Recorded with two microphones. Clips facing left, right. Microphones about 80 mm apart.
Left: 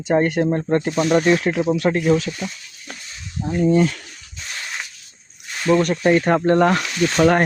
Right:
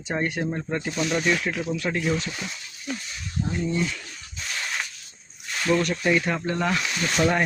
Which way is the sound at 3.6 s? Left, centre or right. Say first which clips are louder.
Left 13 dB; left.